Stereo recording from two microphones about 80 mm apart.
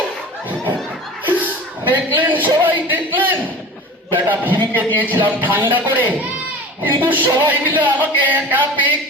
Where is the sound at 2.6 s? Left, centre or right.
Right.